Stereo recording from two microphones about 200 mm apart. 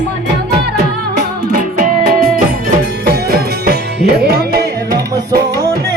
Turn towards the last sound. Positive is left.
turn(degrees=-55)  # may be behind; listen again after turning